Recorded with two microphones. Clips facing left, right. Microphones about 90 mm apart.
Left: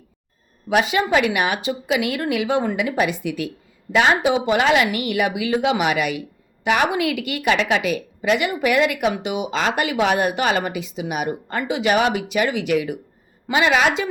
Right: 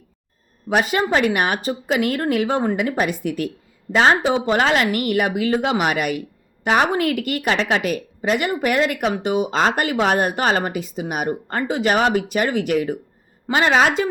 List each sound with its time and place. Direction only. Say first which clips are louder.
0.8 s speech: even; 45° right (ahead or behind)
3.9 s a woman's voice: right 1 dB; 35° right (ahead or behind)